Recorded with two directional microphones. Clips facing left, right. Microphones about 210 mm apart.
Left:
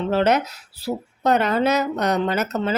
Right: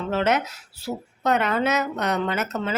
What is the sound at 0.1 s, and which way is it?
Speech, 35° left (ahead or behind).